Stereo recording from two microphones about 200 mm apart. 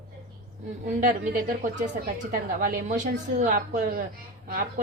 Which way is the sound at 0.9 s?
45° right (ahead or behind).